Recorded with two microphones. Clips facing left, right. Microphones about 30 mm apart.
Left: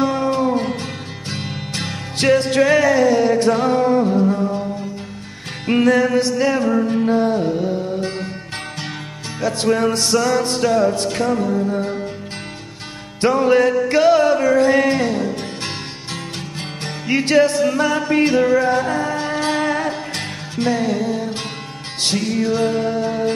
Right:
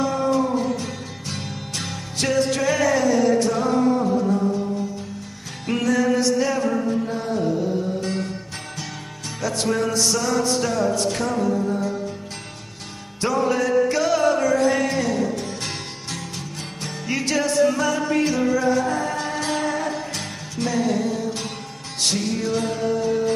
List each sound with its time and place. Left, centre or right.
0.0 s music: left
2.1 s music: left
2.8 s music: left
3.4 s music: left
5.7 s music: left
9.4 s music: left
9.8 s music: left
10.1 s music: left
13.2 s music: left
14.1 s music: left
16.3 s music: left
18.9 s music: left
22.8 s music: left